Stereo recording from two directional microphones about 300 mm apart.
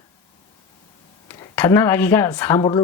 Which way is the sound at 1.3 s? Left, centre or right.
Centre.